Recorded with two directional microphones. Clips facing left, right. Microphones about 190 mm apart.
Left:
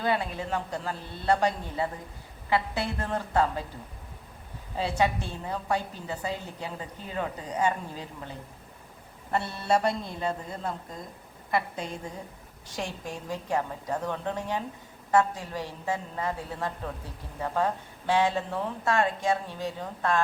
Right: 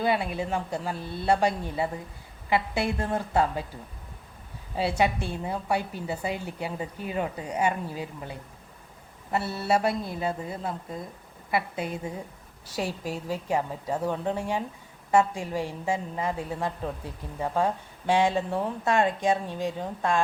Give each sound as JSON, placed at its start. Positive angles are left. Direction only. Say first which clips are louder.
{"t": 0.0, "sound": "a woman's voice", "louder": "right 2 dB", "side_deg": -15}
{"t": 4.8, "sound": "a woman's voice", "louder": "right 2 dB", "side_deg": -10}